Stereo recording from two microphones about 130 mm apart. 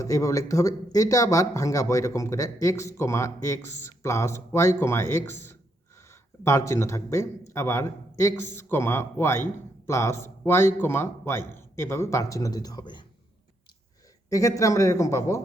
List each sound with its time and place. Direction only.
0.0 s speech: 25° left (ahead or behind)
14.3 s speech: 25° left (ahead or behind)